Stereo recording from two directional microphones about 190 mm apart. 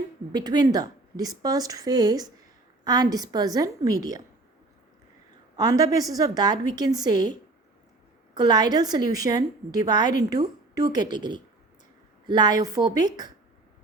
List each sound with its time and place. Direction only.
0.3 s a woman's voice: 20° right (ahead or behind)
5.5 s a woman's voice: 20° right (ahead or behind)
8.4 s a woman's voice: 20° right (ahead or behind)